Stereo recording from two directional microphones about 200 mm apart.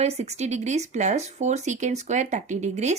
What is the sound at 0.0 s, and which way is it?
Speech, 30° right (ahead or behind).